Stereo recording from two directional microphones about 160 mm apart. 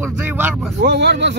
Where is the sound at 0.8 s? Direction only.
90° right.